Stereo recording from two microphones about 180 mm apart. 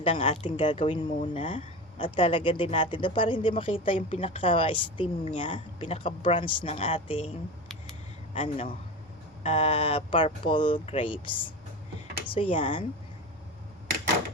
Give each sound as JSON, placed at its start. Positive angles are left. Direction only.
{"t": 0.0, "sound": "speech", "side_deg": 35}
{"t": 8.4, "sound": "speech", "side_deg": 30}